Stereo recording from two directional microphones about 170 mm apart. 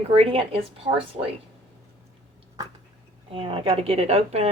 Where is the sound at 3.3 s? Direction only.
30° right (ahead or behind).